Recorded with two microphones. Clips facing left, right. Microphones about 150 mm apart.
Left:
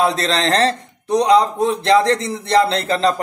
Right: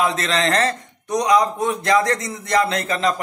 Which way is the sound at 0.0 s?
35° left (ahead or behind).